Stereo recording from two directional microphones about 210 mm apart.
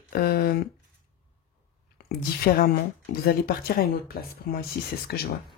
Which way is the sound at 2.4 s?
45° left (ahead or behind).